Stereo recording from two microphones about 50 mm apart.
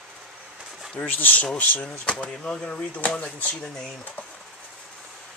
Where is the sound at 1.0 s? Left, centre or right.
Left.